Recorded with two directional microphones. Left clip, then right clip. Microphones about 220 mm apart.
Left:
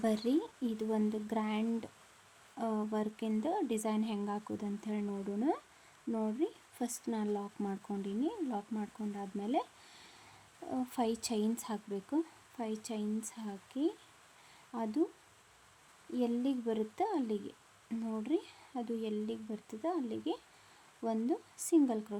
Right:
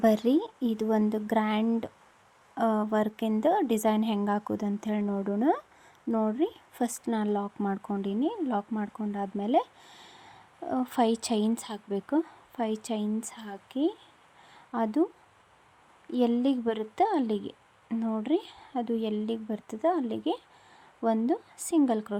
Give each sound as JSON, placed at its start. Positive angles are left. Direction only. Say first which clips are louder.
{"t": 0.0, "sound": "speech", "louder": "right 9 dB", "side_deg": -25}
{"t": 16.1, "sound": "speech", "louder": "right 8 dB", "side_deg": -20}